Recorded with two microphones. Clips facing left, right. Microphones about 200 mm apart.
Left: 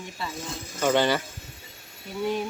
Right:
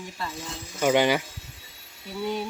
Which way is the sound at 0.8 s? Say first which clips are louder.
Right 1 dB; 15° right (ahead or behind).